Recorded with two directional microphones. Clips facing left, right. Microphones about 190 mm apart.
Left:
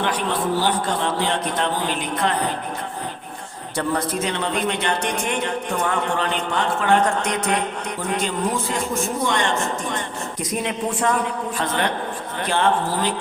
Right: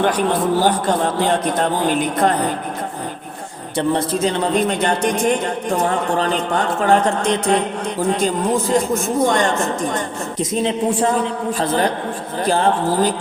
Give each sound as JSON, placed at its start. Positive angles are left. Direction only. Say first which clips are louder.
{"t": 0.6, "sound": "a woman's voice", "louder": "right 5 dB", "side_deg": -45}
{"t": 3.8, "sound": "a man's voice", "louder": "right 5 dB", "side_deg": -30}
{"t": 8.2, "sound": "a man's voice", "louder": "right 5 dB", "side_deg": -40}
{"t": 10.5, "sound": "a man's voice", "louder": "right 6 dB", "side_deg": -30}